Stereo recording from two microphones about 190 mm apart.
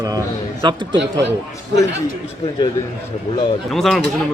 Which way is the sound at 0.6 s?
25° right (ahead or behind).